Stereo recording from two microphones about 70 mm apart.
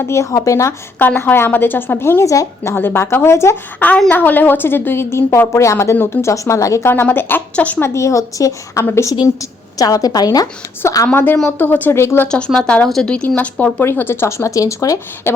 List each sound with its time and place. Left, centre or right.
0.0 s a woman's voice: left
0.9 s a woman's voice: left
2.3 s speech: left
2.7 s a woman's voice: left
3.8 s a woman's voice: left
6.8 s a woman's voice: left
7.8 s speech: left
8.8 s a woman's voice: left
9.7 s a woman's voice: left
10.8 s speech: left
11.1 s a woman's voice: left
12.5 s speech: centre
13.2 s a woman's voice: left
13.8 s speech: left